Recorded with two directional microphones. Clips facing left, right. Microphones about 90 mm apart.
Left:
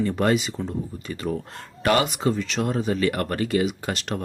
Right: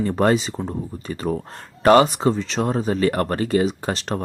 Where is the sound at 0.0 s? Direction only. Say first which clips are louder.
Right 3 dB; 35° right (ahead or behind).